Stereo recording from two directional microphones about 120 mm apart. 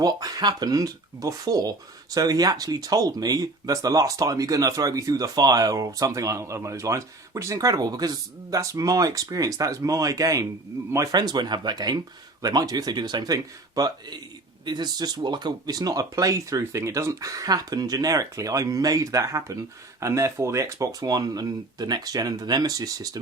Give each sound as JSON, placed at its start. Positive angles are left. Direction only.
{"t": 0.0, "sound": "speech", "side_deg": -30}